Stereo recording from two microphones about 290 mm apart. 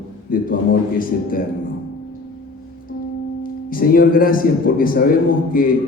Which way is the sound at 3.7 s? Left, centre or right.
Left.